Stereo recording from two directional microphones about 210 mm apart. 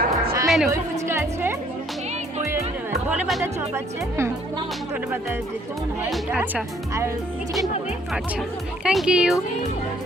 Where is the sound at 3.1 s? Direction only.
5° right (ahead or behind).